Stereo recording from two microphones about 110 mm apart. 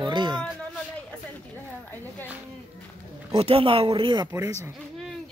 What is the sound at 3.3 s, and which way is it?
Speech, 60° right (ahead or behind).